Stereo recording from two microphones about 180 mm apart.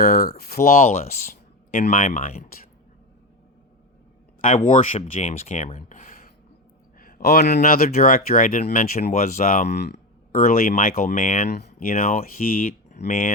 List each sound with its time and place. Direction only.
0.0 s speech: 55° left (ahead or behind)
4.5 s speech: 40° left (ahead or behind)
7.0 s a sound: 55° left (ahead or behind)
7.6 s speech: 55° left (ahead or behind); by 11.4 s 40° left (ahead or behind)
11.4 s speech: 65° left (ahead or behind); by 13.2 s 50° left (ahead or behind)